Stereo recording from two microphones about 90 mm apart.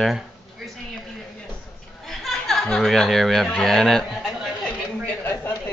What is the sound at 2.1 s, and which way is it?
Snicker, 5° left (ahead or behind).